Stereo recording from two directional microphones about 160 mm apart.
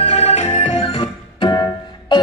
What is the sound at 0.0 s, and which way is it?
Organ, 40° left (ahead or behind).